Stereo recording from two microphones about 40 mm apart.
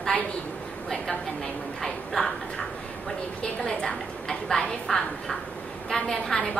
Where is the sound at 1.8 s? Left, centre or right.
Centre.